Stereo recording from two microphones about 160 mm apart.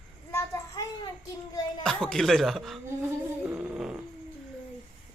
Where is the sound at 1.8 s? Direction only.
5° left (ahead or behind).